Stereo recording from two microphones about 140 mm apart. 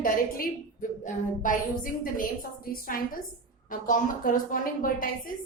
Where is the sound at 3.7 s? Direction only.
75° left (ahead or behind).